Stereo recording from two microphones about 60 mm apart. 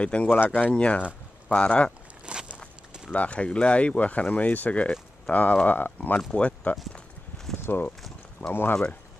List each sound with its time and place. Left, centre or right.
0.0 s speech: centre
2.2 s a sound: centre
3.1 s speech: left
6.3 s speech: centre
6.9 s walk: centre
7.6 s speech: left